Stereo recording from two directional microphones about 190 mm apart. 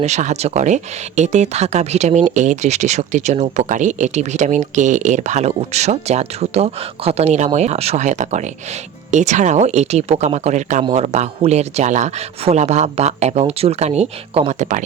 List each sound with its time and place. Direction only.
0.0 s speech: 40° right (ahead or behind)